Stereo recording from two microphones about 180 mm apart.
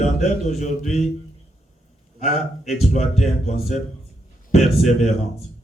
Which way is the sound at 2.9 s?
40° left (ahead or behind).